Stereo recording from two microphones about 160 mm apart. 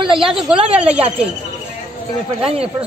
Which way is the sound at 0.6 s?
40° right (ahead or behind).